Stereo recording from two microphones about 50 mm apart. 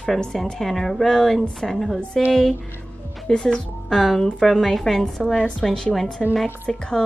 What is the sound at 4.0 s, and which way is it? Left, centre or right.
A woman's voice, centre.